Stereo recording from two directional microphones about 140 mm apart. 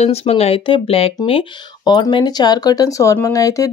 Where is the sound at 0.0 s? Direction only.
45° left (ahead or behind).